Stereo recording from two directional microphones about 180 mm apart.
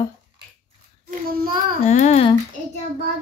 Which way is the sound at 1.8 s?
40° left (ahead or behind).